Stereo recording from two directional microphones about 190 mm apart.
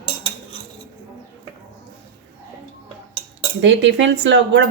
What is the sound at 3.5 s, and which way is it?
Speech, 75° right (ahead or behind).